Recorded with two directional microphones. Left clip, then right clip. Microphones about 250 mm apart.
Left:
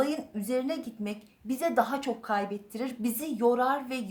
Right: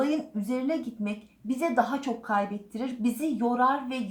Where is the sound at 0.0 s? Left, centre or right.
Left.